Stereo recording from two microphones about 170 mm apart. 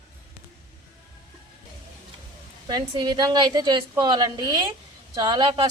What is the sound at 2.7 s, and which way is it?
A woman's voice, 25° right (ahead or behind).